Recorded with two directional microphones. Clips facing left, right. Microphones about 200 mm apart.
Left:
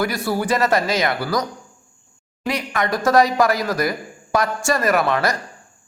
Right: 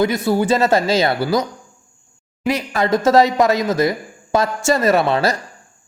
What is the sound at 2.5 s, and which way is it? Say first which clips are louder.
Speech: right 5 dB; 25° right (ahead or behind).